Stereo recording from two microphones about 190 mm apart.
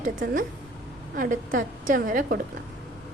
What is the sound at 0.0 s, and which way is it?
A woman's voice, 45° right (ahead or behind).